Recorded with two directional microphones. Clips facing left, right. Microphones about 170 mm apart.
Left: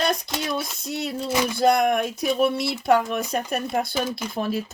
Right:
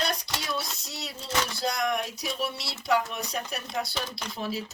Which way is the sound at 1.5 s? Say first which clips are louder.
Left 13 dB; 55° left (ahead or behind).